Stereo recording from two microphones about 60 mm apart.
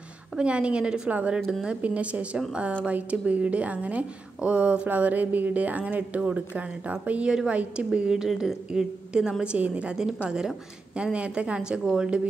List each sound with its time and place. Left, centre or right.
0.4 s a woman's voice: centre